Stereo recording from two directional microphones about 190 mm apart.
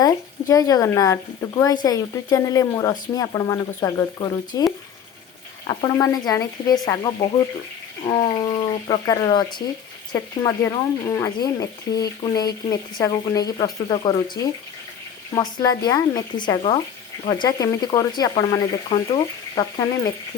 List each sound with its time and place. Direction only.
0.0 s speech: 20° left (ahead or behind)
15.4 s speech: 20° left (ahead or behind)